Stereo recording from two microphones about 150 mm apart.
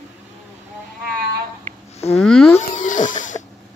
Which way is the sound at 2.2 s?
5° left (ahead or behind).